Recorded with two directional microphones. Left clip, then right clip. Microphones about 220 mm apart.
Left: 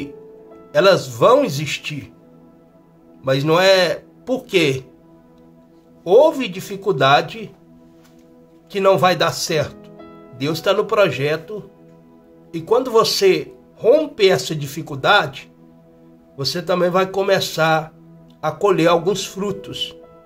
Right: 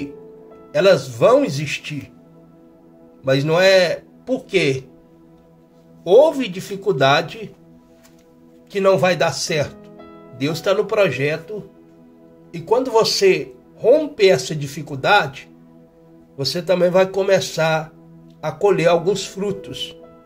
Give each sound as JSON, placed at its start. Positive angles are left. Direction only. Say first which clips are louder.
{"t": 0.7, "sound": "speech", "louder": "left 1 dB", "side_deg": 15}
{"t": 3.3, "sound": "speech", "louder": "even", "side_deg": 15}
{"t": 6.0, "sound": "speech", "louder": "even", "side_deg": 5}
{"t": 8.7, "sound": "speech", "louder": "left 1 dB", "side_deg": 15}
{"t": 9.9, "sound": "music", "louder": "even", "side_deg": 0}
{"t": 10.3, "sound": "speech", "louder": "left 1 dB", "side_deg": 10}
{"t": 12.4, "sound": "speech", "louder": "left 1 dB", "side_deg": 15}